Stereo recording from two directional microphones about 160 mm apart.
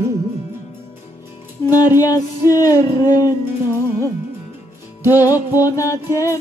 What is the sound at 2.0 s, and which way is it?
Music, 20° left (ahead or behind).